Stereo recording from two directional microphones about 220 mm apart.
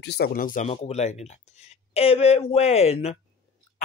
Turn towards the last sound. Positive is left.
turn(degrees=30)  # may be behind; listen again after turning